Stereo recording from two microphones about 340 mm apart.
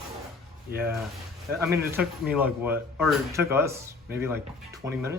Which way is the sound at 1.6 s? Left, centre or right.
Centre.